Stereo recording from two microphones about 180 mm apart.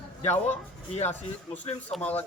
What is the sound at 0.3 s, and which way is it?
Speech, 10° left (ahead or behind).